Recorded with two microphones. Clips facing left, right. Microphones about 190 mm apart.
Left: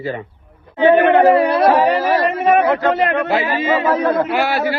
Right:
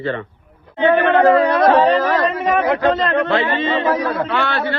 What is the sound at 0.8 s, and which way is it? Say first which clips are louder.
Speech: left 2 dB; 15° left (ahead or behind).